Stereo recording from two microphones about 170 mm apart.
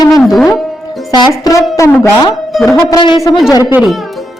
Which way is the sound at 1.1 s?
25° left (ahead or behind).